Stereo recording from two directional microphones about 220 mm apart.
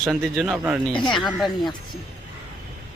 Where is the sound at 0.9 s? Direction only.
20° left (ahead or behind).